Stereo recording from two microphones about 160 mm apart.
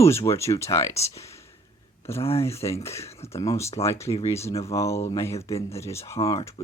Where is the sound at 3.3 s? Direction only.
20° left (ahead or behind).